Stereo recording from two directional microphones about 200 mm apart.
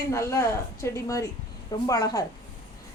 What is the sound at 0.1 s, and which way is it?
A woman's voice, 15° left (ahead or behind).